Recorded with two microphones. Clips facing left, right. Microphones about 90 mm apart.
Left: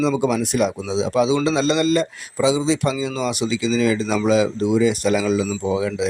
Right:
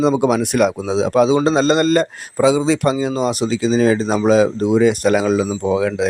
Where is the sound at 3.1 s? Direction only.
40° right (ahead or behind).